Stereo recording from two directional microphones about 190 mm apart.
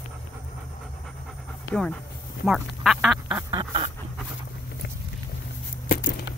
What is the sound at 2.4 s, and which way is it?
Speech, centre (ahead or behind).